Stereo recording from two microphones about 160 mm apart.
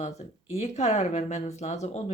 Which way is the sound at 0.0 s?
45° left (ahead or behind).